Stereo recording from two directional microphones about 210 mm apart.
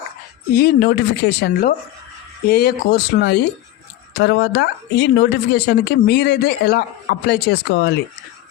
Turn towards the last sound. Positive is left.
turn(degrees=55)  # may be behind; listen again after turning